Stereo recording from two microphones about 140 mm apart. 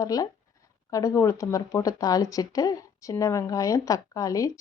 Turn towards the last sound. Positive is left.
turn(degrees=25)  # may be behind; listen again after turning